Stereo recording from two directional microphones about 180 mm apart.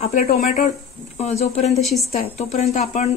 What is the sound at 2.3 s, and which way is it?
Speech, 40° left (ahead or behind).